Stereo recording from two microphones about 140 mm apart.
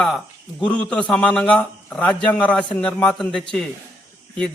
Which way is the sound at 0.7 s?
10° left (ahead or behind).